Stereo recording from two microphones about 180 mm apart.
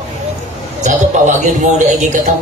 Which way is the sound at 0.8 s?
45° right (ahead or behind).